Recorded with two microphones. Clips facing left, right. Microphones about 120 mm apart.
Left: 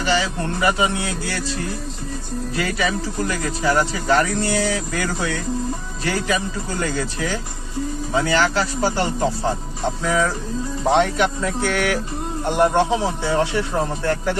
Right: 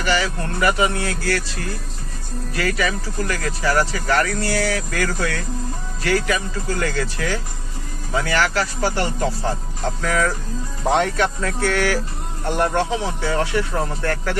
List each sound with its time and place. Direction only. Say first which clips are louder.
0.0 s speech: left 1 dB; 20° left (ahead or behind)
2.6 s speech: right 1 dB; 25° left (ahead or behind)
9.8 s speech: left 1 dB; 15° left (ahead or behind)
11.7 s speech: even; 20° left (ahead or behind)